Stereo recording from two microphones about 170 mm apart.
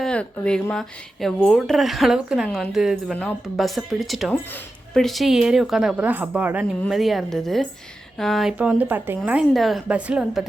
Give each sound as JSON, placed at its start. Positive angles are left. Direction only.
{"t": 0.0, "sound": "speech", "side_deg": 5}